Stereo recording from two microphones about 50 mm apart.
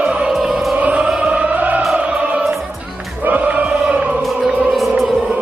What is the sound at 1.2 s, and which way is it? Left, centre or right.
Music, right.